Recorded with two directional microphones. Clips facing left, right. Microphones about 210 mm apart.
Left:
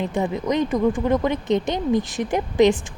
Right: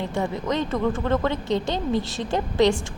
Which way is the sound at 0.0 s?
20° left (ahead or behind).